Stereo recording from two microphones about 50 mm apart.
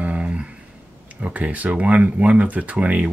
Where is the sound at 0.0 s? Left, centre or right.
Right.